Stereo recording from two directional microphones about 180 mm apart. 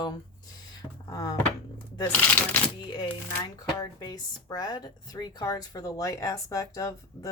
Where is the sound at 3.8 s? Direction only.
20° left (ahead or behind).